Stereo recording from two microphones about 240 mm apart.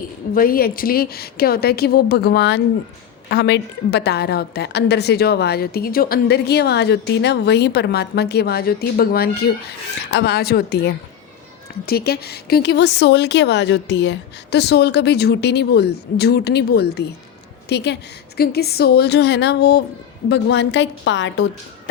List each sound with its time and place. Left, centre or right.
0.3 s a woman's voice: left